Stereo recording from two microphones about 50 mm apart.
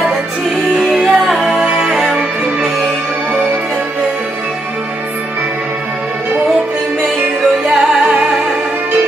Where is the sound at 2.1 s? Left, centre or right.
Right.